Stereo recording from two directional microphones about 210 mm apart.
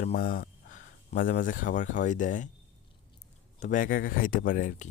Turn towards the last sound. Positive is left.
turn(degrees=35)  # may be behind; listen again after turning